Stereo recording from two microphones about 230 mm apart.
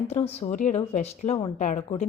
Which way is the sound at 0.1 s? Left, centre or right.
Left.